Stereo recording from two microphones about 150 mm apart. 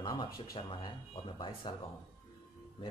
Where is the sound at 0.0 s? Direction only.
30° left (ahead or behind).